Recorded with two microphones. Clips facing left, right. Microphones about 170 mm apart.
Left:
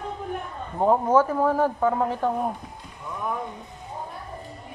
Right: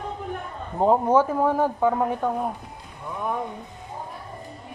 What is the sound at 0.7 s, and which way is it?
A man's voice, 15° right (ahead or behind).